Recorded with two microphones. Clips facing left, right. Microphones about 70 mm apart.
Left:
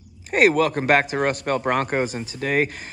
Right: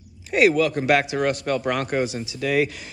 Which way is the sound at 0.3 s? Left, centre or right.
Left.